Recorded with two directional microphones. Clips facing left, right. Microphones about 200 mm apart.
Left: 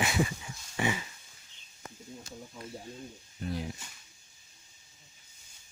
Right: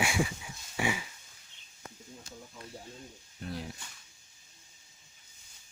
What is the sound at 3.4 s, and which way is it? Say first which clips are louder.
Speech: left 4 dB; centre (ahead or behind).